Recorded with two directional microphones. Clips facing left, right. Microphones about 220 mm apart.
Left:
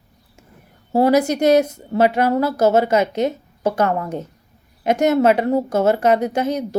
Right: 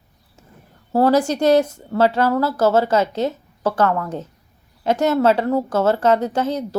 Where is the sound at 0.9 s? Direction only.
15° left (ahead or behind).